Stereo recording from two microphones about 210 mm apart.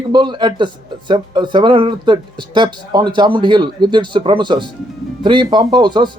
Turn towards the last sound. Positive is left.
turn(degrees=-20)  # may be behind; listen again after turning